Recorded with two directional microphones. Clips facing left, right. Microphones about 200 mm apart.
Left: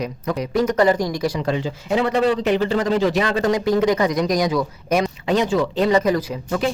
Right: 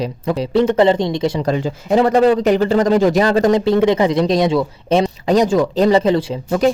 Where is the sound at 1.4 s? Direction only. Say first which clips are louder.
Right 4 dB; 40° right (ahead or behind).